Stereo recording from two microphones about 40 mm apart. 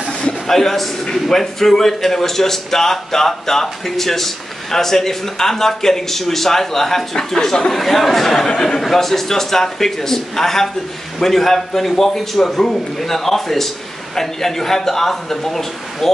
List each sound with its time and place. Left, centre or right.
0.1 s a sound: left
0.5 s a man's voice: centre
7.7 s a man's voice: centre